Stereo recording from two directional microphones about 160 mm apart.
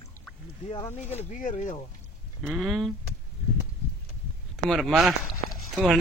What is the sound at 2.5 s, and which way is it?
Speech, centre (ahead or behind).